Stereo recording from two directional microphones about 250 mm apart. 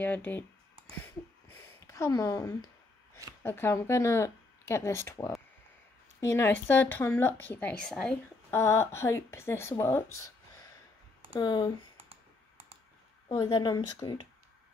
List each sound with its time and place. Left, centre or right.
0.0 s a sound: centre
3.4 s a woman's voice: centre
6.3 s a woman's voice: centre
10.1 s a sound: centre
11.3 s a woman's voice: centre
13.3 s a woman's voice: centre